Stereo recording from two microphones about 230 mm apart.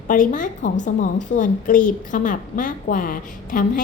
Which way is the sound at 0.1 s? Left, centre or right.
Left.